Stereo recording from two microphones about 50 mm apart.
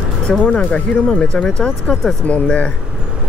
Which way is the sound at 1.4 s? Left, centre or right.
Centre.